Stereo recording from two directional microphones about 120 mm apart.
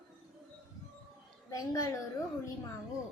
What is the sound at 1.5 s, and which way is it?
Speech, 30° left (ahead or behind).